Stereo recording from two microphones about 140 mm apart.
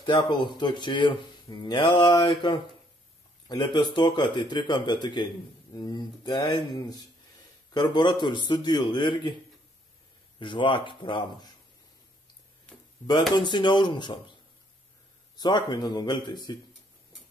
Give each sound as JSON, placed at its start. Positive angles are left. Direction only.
{"t": 0.0, "sound": "speech", "side_deg": 35}
{"t": 10.4, "sound": "speech", "side_deg": 35}
{"t": 13.3, "sound": "speech", "side_deg": 30}
{"t": 15.3, "sound": "speech", "side_deg": 30}